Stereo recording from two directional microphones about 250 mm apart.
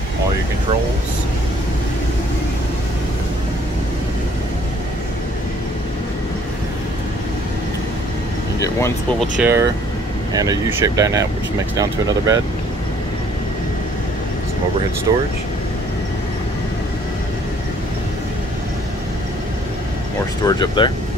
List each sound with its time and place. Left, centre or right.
9.4 s speech: centre
15.1 s speech: centre
20.4 s speech: centre